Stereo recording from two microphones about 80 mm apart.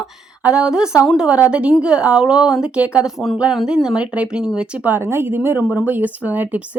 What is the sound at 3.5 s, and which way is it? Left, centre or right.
A woman's voice, centre.